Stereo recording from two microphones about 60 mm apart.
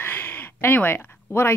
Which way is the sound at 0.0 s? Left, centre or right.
Left.